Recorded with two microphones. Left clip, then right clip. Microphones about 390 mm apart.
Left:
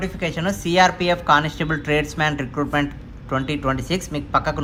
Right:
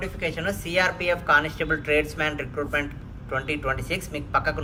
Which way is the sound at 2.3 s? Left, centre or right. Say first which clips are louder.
Left 4 dB; right.